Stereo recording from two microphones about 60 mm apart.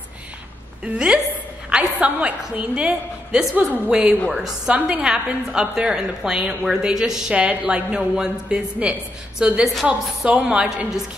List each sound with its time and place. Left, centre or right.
0.8 s a woman's voice: centre
3.5 s a woman's voice: right
4.3 s a woman's voice: centre